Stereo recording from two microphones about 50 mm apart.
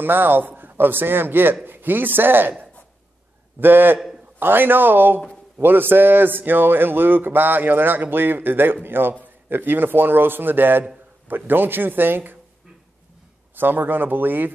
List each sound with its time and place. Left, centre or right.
0.0 s speech: right
3.5 s speech: right
13.6 s speech: right